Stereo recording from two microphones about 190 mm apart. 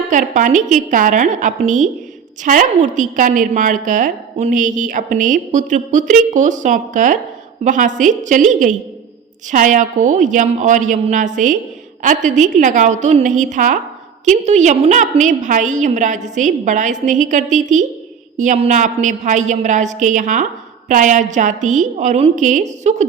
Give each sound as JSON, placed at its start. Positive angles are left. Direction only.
{"t": 0.1, "sound": "a woman's voice", "side_deg": -45}